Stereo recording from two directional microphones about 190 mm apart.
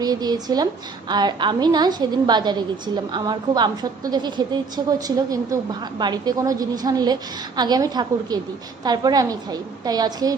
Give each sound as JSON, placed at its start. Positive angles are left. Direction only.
{"t": 0.0, "sound": "a woman's voice", "side_deg": -20}